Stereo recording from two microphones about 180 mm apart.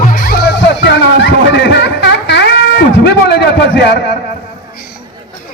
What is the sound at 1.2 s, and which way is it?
Music, 75° left (ahead or behind).